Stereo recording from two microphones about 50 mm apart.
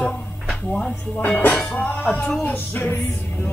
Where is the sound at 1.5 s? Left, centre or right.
Left.